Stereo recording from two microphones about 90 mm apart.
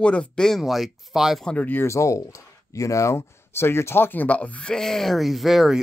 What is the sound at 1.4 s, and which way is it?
Speech, 20° left (ahead or behind).